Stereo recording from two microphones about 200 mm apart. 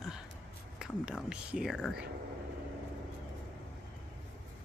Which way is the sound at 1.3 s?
5° right (ahead or behind).